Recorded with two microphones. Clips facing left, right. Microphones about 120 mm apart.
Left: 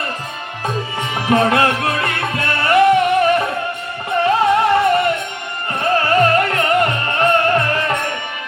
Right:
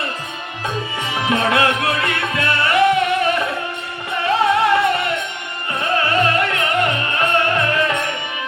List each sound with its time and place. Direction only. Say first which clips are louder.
1.3 s music: left 3 dB; 40° left (ahead or behind)
4.5 s music: left 2 dB; 45° left (ahead or behind)